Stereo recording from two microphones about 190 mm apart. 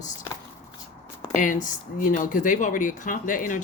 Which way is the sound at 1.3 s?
45° left (ahead or behind).